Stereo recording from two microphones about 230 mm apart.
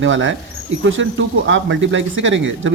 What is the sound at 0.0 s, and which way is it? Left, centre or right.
Speech, right.